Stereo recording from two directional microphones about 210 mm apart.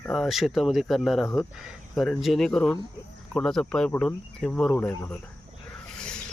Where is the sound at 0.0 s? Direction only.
5° left (ahead or behind).